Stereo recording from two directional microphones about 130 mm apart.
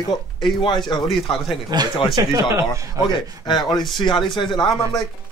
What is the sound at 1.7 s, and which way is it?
Speech, 30° right (ahead or behind).